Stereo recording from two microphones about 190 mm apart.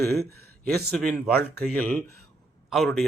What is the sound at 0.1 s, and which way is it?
Speech, 55° right (ahead or behind).